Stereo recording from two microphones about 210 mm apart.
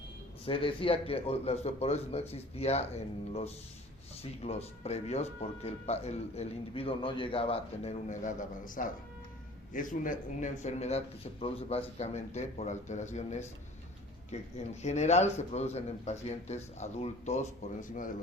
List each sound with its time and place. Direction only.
0.4 s speech: 25° left (ahead or behind)